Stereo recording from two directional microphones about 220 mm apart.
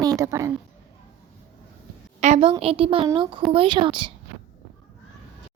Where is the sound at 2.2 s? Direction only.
25° right (ahead or behind).